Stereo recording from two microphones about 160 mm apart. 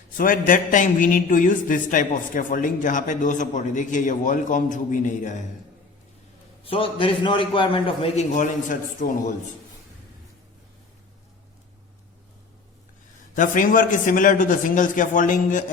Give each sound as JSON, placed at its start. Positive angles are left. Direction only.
{"t": 0.2, "sound": "a man's voice", "side_deg": 55}
{"t": 6.7, "sound": "a man's voice", "side_deg": 35}
{"t": 13.3, "sound": "a man's voice", "side_deg": 55}